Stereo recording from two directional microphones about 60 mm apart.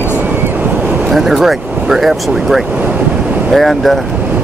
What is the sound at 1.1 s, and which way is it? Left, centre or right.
Speech, centre.